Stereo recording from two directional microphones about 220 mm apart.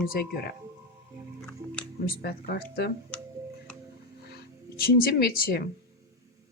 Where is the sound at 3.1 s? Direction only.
5° left (ahead or behind).